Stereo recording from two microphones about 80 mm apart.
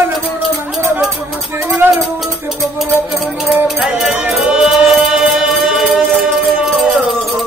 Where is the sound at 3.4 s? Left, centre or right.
Centre.